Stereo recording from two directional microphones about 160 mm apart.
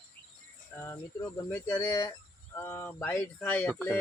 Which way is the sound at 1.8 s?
20° left (ahead or behind).